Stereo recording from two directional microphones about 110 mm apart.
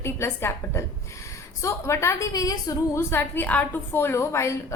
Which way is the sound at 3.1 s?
15° left (ahead or behind).